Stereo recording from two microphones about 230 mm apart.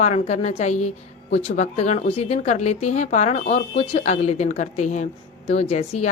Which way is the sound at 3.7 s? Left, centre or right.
Left.